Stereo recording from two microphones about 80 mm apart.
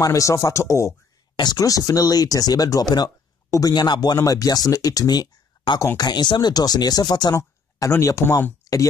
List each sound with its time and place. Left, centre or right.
0.0 s speech: left
1.3 s speech: left
3.4 s a man's voice: left
3.7 s speech: left
7.3 s speech: left